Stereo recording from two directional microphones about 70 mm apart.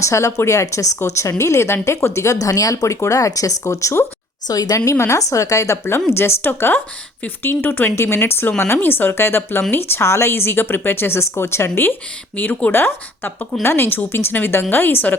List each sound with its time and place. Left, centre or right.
0.0 s speech: left
4.4 s a woman's voice: left
4.9 s a woman's voice: left